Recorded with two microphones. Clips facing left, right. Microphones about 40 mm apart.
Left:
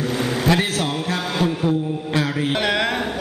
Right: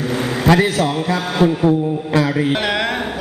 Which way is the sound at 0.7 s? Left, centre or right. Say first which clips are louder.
Right 5 dB; right.